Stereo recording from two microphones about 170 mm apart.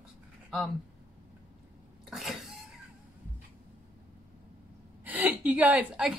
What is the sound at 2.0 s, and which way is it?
Sneeze, centre (ahead or behind).